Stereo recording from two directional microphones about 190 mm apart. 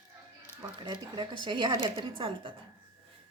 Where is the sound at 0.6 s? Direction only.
25° right (ahead or behind).